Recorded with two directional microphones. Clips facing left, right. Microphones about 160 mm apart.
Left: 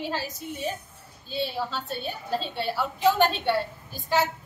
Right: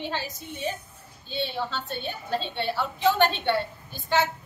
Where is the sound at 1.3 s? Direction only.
5° left (ahead or behind).